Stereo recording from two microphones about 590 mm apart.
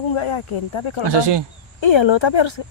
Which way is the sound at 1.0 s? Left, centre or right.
Right.